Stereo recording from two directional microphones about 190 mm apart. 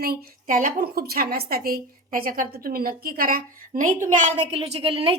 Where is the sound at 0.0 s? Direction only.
50° right (ahead or behind).